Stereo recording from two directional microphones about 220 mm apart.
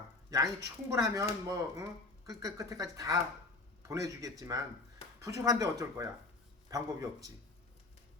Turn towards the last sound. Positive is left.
turn(degrees=-15)  # may be behind; listen again after turning